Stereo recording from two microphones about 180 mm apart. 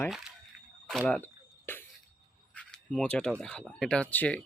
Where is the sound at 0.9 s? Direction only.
Centre (ahead or behind).